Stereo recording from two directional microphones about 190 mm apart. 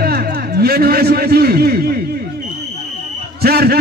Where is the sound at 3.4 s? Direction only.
55° right (ahead or behind).